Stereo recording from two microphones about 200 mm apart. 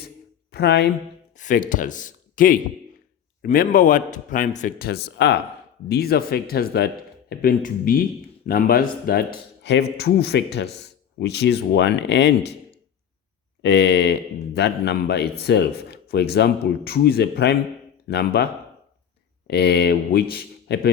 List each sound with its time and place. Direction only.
0.5 s a man's voice: 55° left (ahead or behind)
1.4 s a man's voice: 40° left (ahead or behind); by 12.3 s 60° left (ahead or behind)
13.6 s a man's voice: 60° left (ahead or behind)
19.5 s a man's voice: 55° left (ahead or behind)